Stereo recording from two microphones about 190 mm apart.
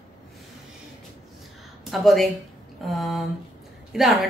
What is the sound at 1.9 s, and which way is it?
A woman's voice, centre (ahead or behind).